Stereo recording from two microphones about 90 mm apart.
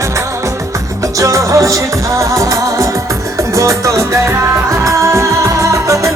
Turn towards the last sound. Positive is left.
turn(degrees=-35)  # may be behind; listen again after turning